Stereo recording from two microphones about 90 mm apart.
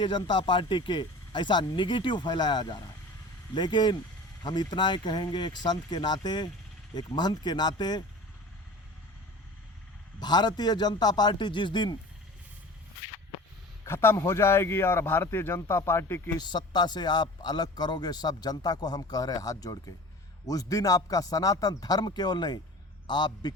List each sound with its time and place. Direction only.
0.0 s speech: 60° left (ahead or behind)
10.2 s speech: 50° left (ahead or behind)
13.8 s speech: 25° left (ahead or behind)
16.4 s speech: 55° left (ahead or behind)